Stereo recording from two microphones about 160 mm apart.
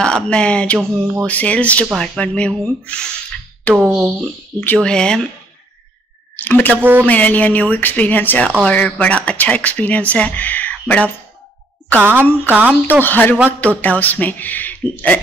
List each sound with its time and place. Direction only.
0.0 s speech: 5° left (ahead or behind)
3.7 s speech: 10° right (ahead or behind)
4.0 s speech: 5° left (ahead or behind)
6.3 s speech: 10° left (ahead or behind)
6.8 s speech: 10° right (ahead or behind)
7.1 s speech: 10° left (ahead or behind)
12.0 s speech: 15° right (ahead or behind)
13.0 s speech: 10° left (ahead or behind)